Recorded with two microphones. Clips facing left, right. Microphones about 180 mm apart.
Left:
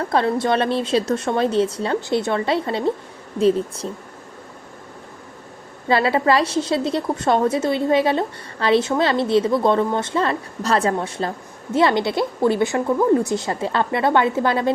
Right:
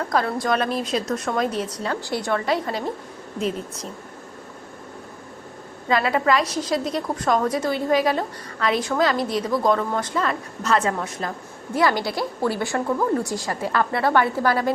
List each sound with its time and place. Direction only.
0.1 s a woman's voice: 25° left (ahead or behind)
5.9 s a woman's voice: 30° left (ahead or behind)